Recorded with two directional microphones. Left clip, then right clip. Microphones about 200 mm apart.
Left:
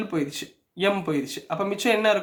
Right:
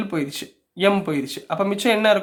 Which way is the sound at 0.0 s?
25° right (ahead or behind).